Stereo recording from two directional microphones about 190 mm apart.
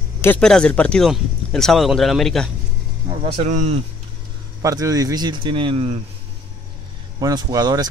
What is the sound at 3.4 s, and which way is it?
Speech, 35° right (ahead or behind).